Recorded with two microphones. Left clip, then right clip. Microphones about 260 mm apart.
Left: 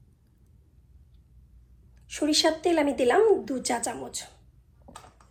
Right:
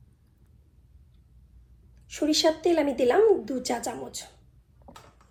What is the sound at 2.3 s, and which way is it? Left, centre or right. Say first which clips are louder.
A woman's voice: right 1 dB; left.